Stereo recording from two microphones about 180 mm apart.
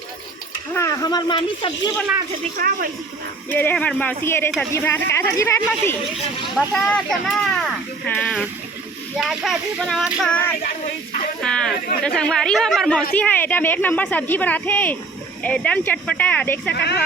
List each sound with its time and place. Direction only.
0.7 s speech: 15° left (ahead or behind)
2.6 s speech: 55° right (ahead or behind)
3.5 s a woman's voice: 10° left (ahead or behind)
6.6 s speech: centre (ahead or behind)
10.2 s a woman's voice: 10° left (ahead or behind)
11.4 s a sound: 5° left (ahead or behind)
12.0 s a woman's voice: 5° left (ahead or behind)
16.7 s speech: 70° left (ahead or behind)